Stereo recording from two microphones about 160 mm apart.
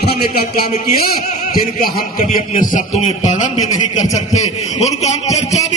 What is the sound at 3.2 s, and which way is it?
A man's voice, 50° left (ahead or behind).